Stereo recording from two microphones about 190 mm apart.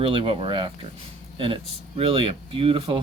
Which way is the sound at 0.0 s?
25° right (ahead or behind).